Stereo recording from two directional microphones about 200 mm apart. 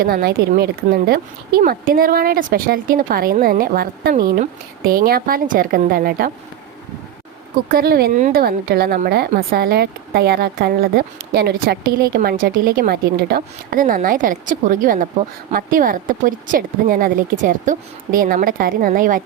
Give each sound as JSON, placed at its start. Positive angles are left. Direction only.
{"t": 0.0, "sound": "a woman's voice", "side_deg": -50}
{"t": 7.7, "sound": "a woman's voice", "side_deg": -50}